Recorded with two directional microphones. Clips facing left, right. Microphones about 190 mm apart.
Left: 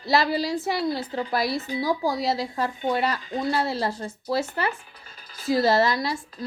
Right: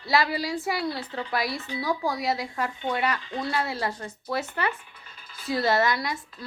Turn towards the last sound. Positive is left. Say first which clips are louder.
# left 3 dB
turn(degrees=30)  # may be behind; listen again after turning